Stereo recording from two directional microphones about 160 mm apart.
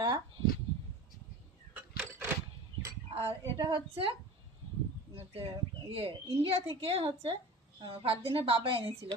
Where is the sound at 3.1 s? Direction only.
30° right (ahead or behind).